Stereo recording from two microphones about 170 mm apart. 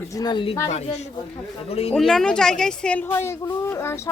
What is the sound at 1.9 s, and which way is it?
A woman's voice, centre (ahead or behind).